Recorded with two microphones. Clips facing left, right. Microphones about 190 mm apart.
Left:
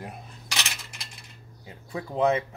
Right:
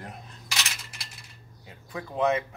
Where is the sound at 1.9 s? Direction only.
30° left (ahead or behind).